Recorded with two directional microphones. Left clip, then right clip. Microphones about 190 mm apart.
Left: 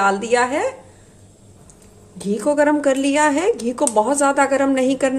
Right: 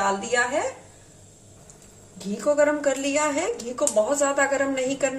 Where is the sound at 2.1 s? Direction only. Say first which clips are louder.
Left 4 dB; 45° left (ahead or behind).